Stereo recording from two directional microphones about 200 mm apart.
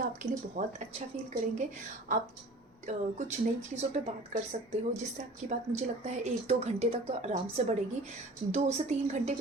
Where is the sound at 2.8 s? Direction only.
35° right (ahead or behind).